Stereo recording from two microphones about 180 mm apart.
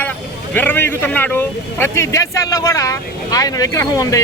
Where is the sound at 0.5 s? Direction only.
10° left (ahead or behind).